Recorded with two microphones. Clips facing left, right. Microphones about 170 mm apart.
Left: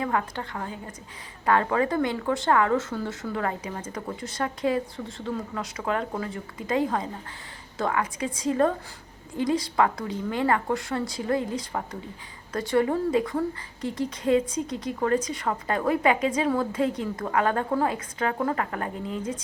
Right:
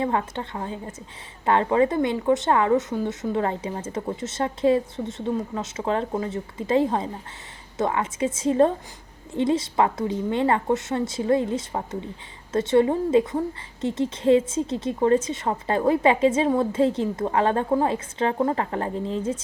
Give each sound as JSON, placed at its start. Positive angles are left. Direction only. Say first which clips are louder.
{"t": 0.0, "sound": "a woman's voice", "louder": "right 3 dB", "side_deg": -25}